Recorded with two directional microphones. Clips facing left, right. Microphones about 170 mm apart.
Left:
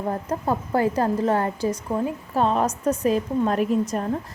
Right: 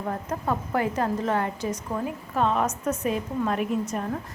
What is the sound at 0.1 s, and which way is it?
A woman's voice, 30° left (ahead or behind).